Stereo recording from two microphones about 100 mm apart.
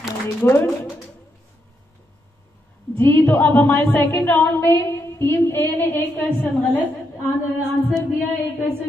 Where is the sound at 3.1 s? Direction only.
20° left (ahead or behind).